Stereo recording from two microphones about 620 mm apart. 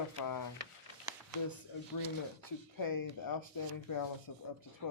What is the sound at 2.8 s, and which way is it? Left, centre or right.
Speech, left.